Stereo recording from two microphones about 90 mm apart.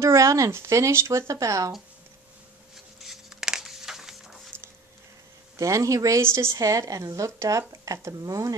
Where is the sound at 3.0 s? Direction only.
5° right (ahead or behind).